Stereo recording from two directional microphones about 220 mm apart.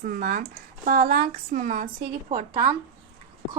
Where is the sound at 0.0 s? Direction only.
40° right (ahead or behind).